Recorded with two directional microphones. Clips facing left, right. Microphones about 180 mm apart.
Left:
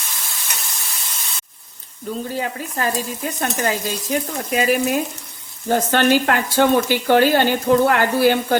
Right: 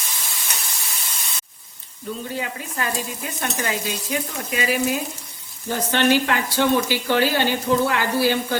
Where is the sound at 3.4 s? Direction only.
40° left (ahead or behind).